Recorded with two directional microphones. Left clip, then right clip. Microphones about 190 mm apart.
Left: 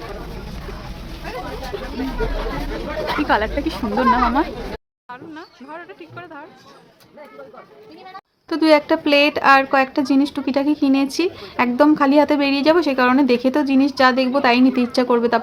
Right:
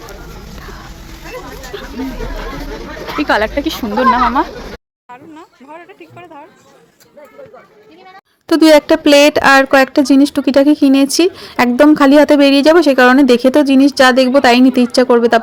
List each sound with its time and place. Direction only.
1.7 s chatter: 20° right (ahead or behind)
3.2 s speech: 25° right (ahead or behind)
5.0 s speech: centre (ahead or behind)
8.4 s speech: 45° right (ahead or behind)